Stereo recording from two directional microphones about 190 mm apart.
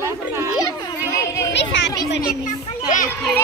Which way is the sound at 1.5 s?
65° left (ahead or behind).